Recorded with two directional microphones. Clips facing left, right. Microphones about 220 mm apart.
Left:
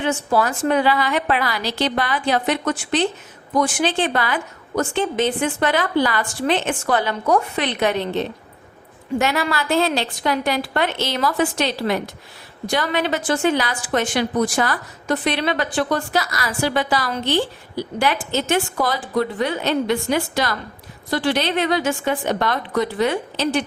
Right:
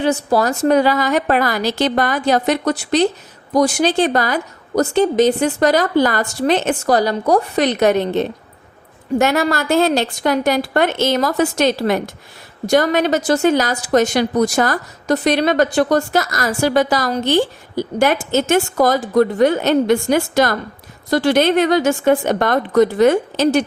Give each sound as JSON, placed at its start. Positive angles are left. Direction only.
{"t": 0.0, "sound": "a woman's voice", "side_deg": -35}